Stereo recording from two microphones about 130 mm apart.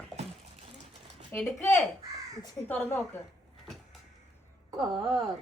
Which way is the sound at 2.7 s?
15° left (ahead or behind).